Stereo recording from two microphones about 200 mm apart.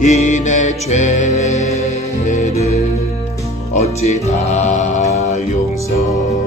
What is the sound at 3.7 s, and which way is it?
Music, 35° left (ahead or behind).